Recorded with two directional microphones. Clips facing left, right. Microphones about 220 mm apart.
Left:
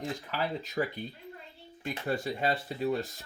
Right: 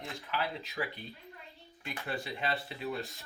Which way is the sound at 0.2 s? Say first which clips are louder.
Left 3 dB; 45° left (ahead or behind).